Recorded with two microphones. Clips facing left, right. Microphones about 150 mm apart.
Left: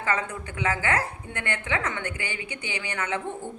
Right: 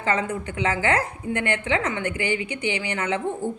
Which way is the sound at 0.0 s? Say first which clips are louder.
Right 4 dB; 25° right (ahead or behind).